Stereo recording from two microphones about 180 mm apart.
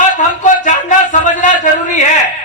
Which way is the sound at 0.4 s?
45° left (ahead or behind).